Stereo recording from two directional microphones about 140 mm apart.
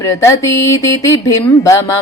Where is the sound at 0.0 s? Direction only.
25° left (ahead or behind).